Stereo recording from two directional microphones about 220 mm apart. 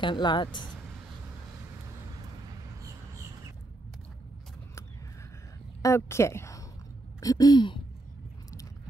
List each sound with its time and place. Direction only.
0.0 s speech: 20° left (ahead or behind)
2.5 s a sound: 15° right (ahead or behind)
5.8 s a woman's voice: 15° left (ahead or behind)